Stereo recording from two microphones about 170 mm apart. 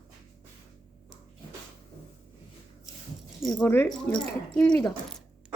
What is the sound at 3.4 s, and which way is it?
Speech, 5° left (ahead or behind).